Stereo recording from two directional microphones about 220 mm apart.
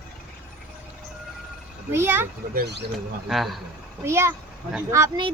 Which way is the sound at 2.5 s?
50° right (ahead or behind).